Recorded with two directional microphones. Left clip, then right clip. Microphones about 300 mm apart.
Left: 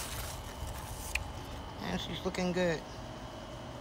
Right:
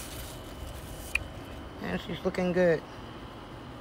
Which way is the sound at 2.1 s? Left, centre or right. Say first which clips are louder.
Right 7 dB; left.